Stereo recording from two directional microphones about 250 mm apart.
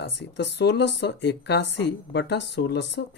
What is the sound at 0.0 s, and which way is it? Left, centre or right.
Speech, left.